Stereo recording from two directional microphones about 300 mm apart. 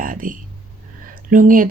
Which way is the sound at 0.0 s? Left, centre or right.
Right.